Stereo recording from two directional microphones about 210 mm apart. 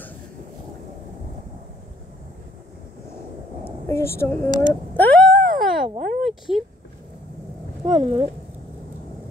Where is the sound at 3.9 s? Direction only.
10° left (ahead or behind).